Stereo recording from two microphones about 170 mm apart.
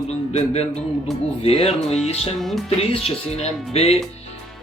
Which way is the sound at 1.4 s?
35° left (ahead or behind).